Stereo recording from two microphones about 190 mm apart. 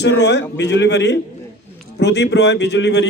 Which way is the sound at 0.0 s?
65° left (ahead or behind).